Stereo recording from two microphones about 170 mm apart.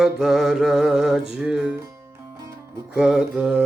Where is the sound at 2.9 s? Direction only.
5° right (ahead or behind).